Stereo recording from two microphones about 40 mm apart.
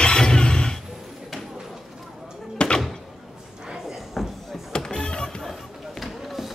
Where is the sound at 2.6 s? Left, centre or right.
Left.